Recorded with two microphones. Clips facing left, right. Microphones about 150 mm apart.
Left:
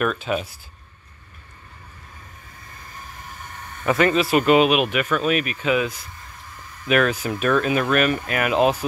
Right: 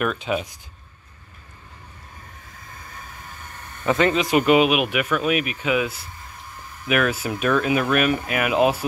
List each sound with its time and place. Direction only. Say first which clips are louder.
0.0 s speech: left 1 dB; 15° right (ahead or behind)
3.8 s speech: left 1 dB; 20° right (ahead or behind)